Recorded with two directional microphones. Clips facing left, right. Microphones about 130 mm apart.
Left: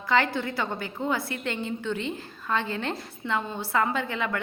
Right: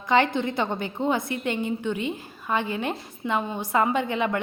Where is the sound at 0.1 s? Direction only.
20° right (ahead or behind).